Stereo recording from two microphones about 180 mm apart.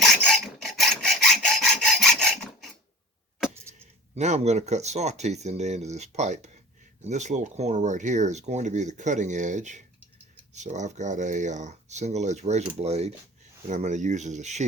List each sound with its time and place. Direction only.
0.2 s filing: centre (ahead or behind)
4.1 s speech: 40° right (ahead or behind)